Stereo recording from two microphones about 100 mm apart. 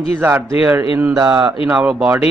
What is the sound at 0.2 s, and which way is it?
Mantra, 20° right (ahead or behind).